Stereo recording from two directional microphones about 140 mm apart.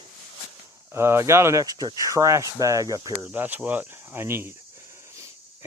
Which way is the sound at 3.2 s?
15° right (ahead or behind).